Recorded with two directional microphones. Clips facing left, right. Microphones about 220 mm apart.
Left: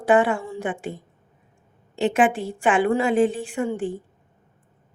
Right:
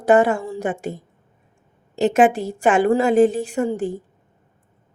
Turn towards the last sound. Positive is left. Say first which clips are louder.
# right 3 dB
turn(degrees=-40)  # may be behind; listen again after turning